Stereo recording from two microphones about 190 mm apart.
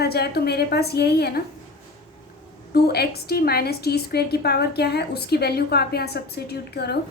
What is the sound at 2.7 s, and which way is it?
A woman's voice, 55° left (ahead or behind).